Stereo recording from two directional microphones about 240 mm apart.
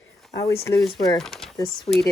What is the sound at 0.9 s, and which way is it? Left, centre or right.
Speech, centre.